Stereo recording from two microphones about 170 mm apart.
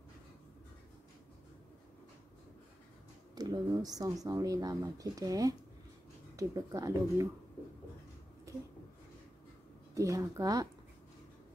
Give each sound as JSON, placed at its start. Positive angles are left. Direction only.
{"t": 3.3, "sound": "speech", "side_deg": -25}
{"t": 8.5, "sound": "a sound", "side_deg": -20}
{"t": 9.9, "sound": "speech", "side_deg": -20}